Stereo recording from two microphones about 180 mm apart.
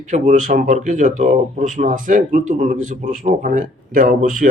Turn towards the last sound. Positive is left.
turn(degrees=-50)  # may be behind; listen again after turning